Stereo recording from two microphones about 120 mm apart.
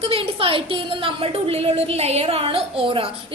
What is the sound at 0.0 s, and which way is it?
A woman's voice, 50° right (ahead or behind).